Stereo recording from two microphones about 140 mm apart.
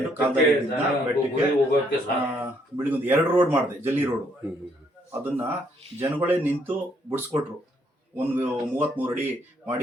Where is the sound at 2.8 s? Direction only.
15° right (ahead or behind).